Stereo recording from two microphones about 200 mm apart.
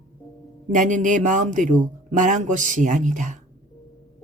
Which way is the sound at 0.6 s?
40° right (ahead or behind).